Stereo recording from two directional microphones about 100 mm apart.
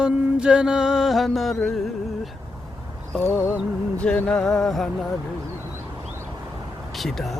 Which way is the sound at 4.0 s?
10° left (ahead or behind).